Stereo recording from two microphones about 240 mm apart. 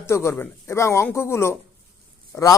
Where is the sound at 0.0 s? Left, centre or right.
Centre.